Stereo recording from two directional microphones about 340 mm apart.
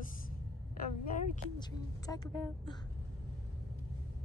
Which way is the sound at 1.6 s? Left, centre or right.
Centre.